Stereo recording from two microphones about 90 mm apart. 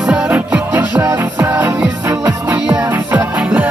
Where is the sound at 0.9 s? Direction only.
35° right (ahead or behind).